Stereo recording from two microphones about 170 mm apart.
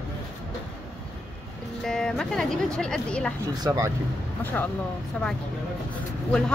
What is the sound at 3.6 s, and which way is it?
Speech, 20° right (ahead or behind).